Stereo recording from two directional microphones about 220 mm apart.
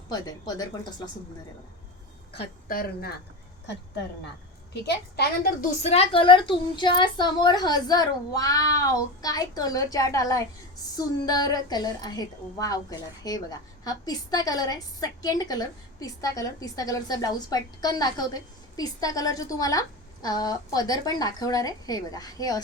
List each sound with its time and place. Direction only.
0.1 s a woman's voice: 15° left (ahead or behind)
2.6 s speech: 40° left (ahead or behind)
4.7 s a woman's voice: 50° left (ahead or behind)
5.8 s a woman's voice: 25° left (ahead or behind)